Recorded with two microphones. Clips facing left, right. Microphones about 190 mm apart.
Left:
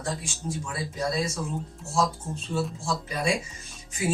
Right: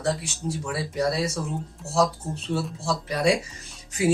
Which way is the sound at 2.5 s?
65° right (ahead or behind).